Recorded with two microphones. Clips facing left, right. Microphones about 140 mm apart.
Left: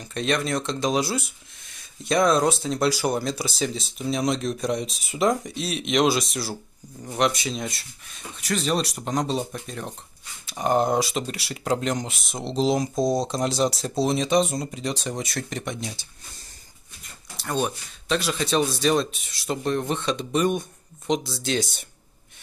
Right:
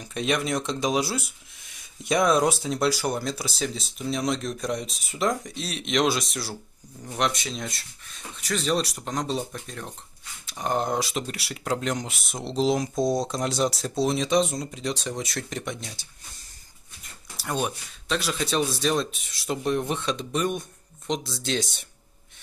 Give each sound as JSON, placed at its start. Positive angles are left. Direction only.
{"t": 0.0, "sound": "speech", "side_deg": -10}
{"t": 17.4, "sound": "speech", "side_deg": -5}